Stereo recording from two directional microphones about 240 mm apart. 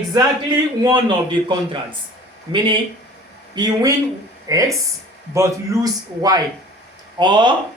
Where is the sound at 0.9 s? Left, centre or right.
Centre.